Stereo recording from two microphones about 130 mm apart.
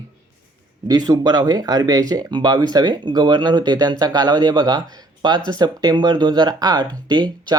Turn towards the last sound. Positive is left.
turn(degrees=-30)  # may be behind; listen again after turning